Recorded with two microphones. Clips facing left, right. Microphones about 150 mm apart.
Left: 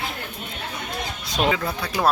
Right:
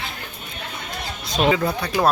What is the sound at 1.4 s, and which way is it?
Speech, centre (ahead or behind).